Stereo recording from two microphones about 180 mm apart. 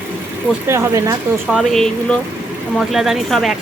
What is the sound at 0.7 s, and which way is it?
Speech, 15° right (ahead or behind).